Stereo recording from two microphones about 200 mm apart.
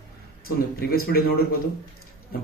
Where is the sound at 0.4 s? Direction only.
50° left (ahead or behind).